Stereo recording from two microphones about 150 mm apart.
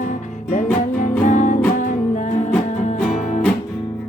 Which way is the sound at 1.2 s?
55° left (ahead or behind).